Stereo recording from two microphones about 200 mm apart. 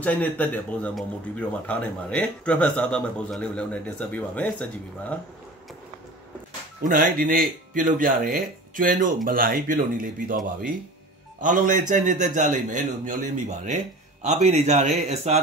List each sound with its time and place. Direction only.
0.0 s speech: 10° left (ahead or behind)
6.8 s speech: 45° right (ahead or behind)
11.4 s a man's voice: 40° right (ahead or behind)